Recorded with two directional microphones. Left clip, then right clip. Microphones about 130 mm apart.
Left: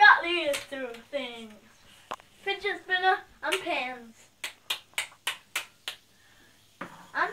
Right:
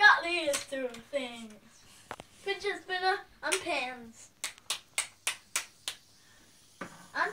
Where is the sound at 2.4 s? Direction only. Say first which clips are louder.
Left 3 dB; 10° left (ahead or behind).